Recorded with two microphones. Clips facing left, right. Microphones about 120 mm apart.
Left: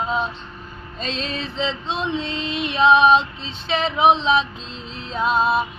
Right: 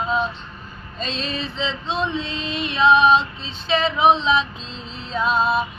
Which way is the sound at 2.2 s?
65° left (ahead or behind).